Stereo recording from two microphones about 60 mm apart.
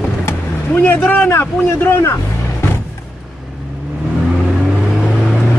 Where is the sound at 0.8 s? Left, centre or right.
Left.